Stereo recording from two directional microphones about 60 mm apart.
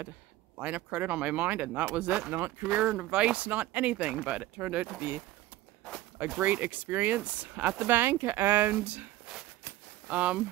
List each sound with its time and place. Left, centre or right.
0.6 s speech: right
2.9 s speech: centre
6.4 s speech: right